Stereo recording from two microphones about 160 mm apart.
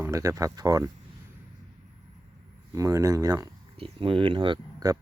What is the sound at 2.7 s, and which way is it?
Speech, 20° right (ahead or behind).